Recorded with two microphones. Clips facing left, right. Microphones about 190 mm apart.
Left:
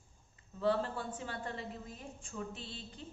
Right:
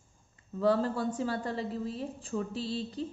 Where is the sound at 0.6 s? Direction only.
40° right (ahead or behind).